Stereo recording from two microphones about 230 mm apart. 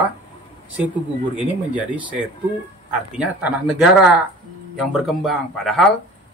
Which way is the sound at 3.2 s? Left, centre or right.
Centre.